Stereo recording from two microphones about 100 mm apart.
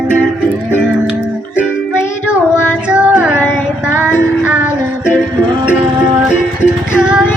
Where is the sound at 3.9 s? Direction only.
15° right (ahead or behind).